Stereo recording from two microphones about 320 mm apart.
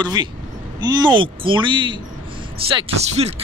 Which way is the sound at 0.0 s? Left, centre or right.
Centre.